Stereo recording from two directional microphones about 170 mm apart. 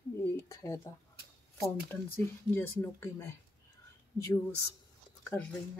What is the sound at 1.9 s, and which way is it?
Speech, 10° left (ahead or behind).